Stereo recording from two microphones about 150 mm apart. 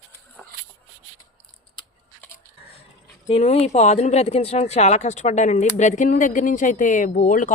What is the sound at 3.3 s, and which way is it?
Speech, 45° left (ahead or behind).